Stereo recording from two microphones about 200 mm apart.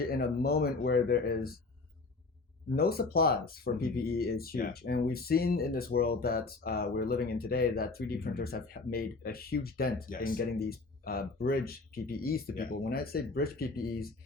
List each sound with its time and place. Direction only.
0.1 s speech: 50° left (ahead or behind)
2.6 s speech: 50° left (ahead or behind)